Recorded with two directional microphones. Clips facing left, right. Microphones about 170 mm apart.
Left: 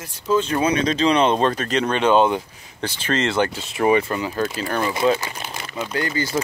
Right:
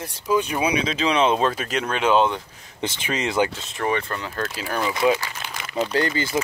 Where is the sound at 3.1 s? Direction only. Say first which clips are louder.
Left 2 dB; 10° right (ahead or behind).